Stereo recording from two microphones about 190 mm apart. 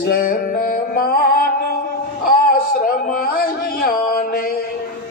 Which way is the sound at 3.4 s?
50° left (ahead or behind).